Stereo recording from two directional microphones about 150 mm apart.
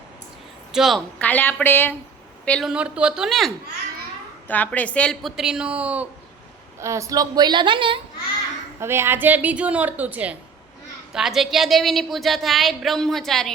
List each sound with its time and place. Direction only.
0.7 s a woman's voice: centre (ahead or behind)
1.2 s a woman's voice: 10° left (ahead or behind)
2.6 s a woman's voice: 5° right (ahead or behind)
4.4 s a woman's voice: 10° left (ahead or behind)
5.4 s a woman's voice: 5° right (ahead or behind)
6.7 s a woman's voice: 20° right (ahead or behind); by 8.0 s 35° right (ahead or behind)
8.8 s a woman's voice: 15° right (ahead or behind); by 13.5 s centre (ahead or behind)